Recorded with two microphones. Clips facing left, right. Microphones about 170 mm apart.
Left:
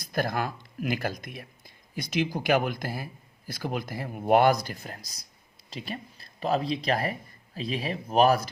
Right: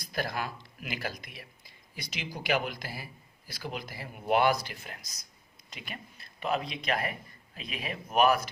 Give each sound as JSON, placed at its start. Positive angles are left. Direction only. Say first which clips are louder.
{"t": 0.0, "sound": "speech", "louder": "left 5 dB", "side_deg": 50}